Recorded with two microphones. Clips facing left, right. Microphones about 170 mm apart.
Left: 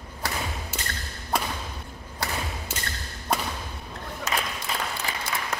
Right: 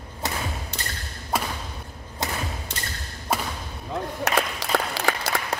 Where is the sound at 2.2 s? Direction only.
20° right (ahead or behind).